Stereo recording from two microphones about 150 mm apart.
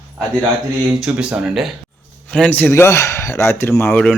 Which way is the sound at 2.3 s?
10° left (ahead or behind).